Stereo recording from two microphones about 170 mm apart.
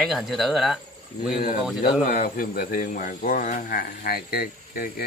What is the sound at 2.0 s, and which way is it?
Speech, 55° left (ahead or behind).